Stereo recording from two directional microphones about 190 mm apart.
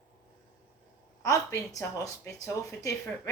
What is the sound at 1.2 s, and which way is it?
A woman's voice, 15° left (ahead or behind).